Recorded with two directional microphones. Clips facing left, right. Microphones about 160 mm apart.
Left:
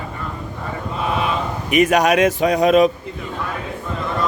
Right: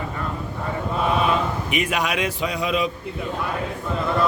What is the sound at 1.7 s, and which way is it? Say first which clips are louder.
Speech: left 11 dB; 45° left (ahead or behind).